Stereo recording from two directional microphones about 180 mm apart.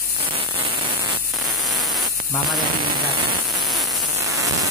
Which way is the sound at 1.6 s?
Centre (ahead or behind).